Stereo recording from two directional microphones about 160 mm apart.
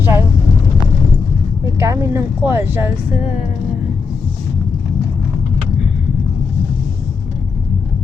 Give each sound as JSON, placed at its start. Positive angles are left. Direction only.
{"t": 0.0, "sound": "vehicle", "side_deg": -15}
{"t": 1.8, "sound": "a sound", "side_deg": -20}
{"t": 2.4, "sound": "speech", "side_deg": -15}